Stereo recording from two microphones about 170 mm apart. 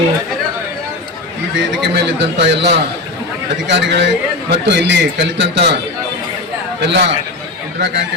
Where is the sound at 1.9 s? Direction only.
90° right.